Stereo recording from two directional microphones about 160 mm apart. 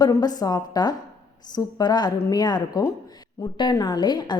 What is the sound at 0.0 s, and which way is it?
A woman's voice, 25° left (ahead or behind).